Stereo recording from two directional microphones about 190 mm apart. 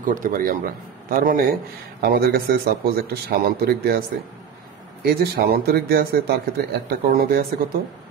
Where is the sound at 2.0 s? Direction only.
55° right (ahead or behind).